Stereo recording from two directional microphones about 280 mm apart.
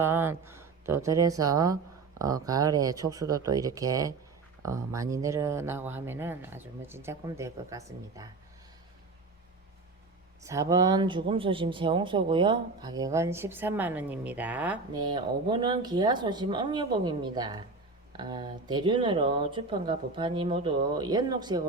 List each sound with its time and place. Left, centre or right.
0.0 s speech: centre
10.4 s speech: centre